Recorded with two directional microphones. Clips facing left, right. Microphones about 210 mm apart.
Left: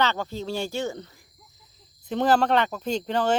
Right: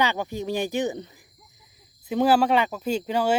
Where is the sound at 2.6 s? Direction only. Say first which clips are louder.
Right 1 dB; 5° right (ahead or behind).